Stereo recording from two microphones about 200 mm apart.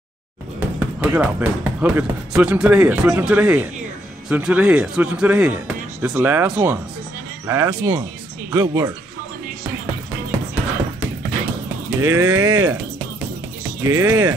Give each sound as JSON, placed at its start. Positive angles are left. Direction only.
{"t": 0.6, "sound": "speech", "side_deg": -5}
{"t": 12.0, "sound": "speech", "side_deg": -15}
{"t": 13.8, "sound": "speech", "side_deg": -15}